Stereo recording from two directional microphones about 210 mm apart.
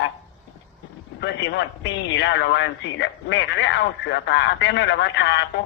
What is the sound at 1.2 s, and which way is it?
A man's voice, 55° left (ahead or behind).